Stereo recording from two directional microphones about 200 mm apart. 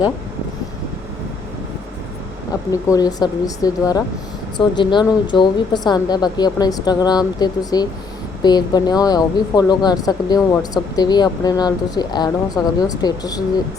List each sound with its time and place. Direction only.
2.5 s speech: 15° left (ahead or behind)